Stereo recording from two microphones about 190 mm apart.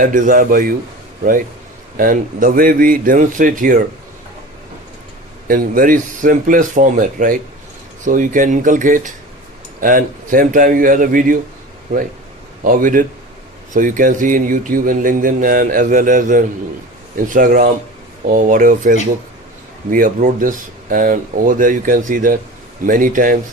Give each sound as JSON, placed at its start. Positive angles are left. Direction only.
{"t": 0.0, "sound": "speech", "side_deg": -45}
{"t": 5.5, "sound": "speech", "side_deg": -45}
{"t": 12.6, "sound": "speech", "side_deg": -45}